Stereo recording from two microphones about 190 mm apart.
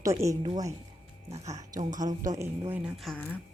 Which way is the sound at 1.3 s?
35° right (ahead or behind).